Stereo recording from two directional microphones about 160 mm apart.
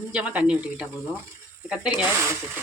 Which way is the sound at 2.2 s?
15° right (ahead or behind).